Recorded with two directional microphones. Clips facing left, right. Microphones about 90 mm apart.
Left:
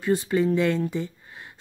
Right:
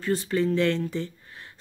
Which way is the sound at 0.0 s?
15° left (ahead or behind).